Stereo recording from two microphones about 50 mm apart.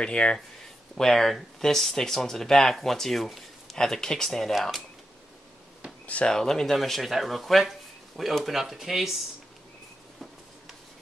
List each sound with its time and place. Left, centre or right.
0.0 s speech: centre
0.9 s speech: centre
6.2 s speech: centre
6.8 s speech: centre